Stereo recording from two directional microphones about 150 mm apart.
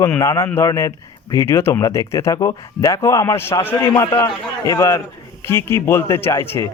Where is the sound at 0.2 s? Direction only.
20° left (ahead or behind).